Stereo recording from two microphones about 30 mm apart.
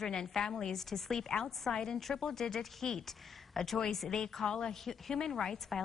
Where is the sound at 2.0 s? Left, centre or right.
Centre.